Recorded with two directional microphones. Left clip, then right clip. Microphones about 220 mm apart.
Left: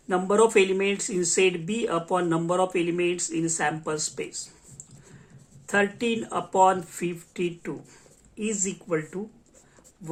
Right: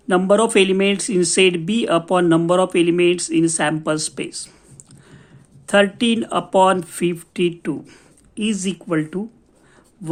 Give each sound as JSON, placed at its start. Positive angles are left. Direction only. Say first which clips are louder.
{"t": 0.1, "sound": "speech", "louder": "right 5 dB", "side_deg": -45}
{"t": 5.6, "sound": "speech", "louder": "right 8 dB", "side_deg": -45}